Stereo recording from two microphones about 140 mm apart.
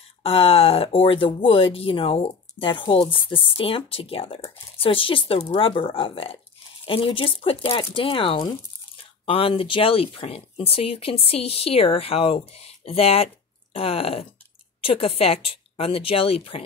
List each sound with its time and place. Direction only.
0.2 s speech: 45° left (ahead or behind)